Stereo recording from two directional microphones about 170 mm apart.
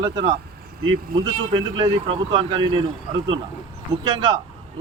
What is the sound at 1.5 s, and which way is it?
Speech, 30° right (ahead or behind).